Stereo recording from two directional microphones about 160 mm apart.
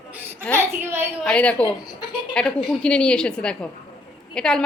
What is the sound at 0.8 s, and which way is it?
Speech, 15° right (ahead or behind).